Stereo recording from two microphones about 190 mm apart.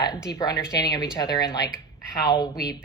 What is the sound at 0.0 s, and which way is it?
Speech, 20° left (ahead or behind).